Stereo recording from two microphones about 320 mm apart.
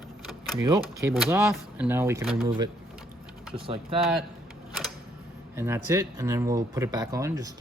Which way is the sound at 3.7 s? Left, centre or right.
Centre.